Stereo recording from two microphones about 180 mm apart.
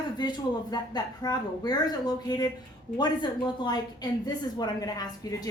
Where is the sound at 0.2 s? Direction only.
25° left (ahead or behind).